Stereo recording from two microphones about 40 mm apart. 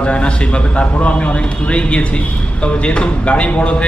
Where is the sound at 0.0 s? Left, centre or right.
Left.